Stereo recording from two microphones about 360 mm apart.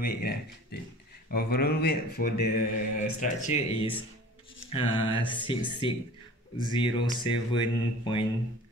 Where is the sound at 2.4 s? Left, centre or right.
Left.